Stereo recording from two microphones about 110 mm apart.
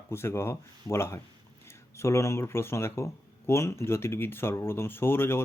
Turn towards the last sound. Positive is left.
turn(degrees=20)  # may be behind; listen again after turning